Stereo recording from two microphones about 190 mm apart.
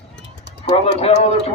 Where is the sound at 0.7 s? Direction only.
30° left (ahead or behind).